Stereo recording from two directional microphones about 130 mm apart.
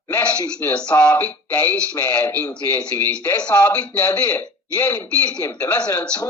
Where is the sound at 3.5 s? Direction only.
25° left (ahead or behind).